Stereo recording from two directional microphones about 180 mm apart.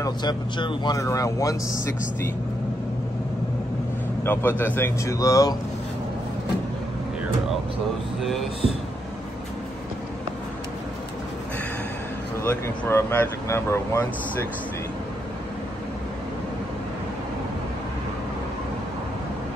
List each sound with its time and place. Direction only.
0.0 s speech: 25° left (ahead or behind)
4.2 s speech: 10° left (ahead or behind)
8.2 s speech: centre (ahead or behind)
12.4 s speech: 15° left (ahead or behind)